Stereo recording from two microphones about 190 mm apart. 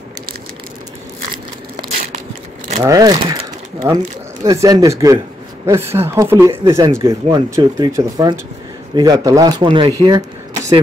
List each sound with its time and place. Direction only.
2.8 s speech: 20° right (ahead or behind)